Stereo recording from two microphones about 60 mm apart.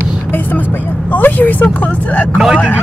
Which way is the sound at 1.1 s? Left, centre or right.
Left.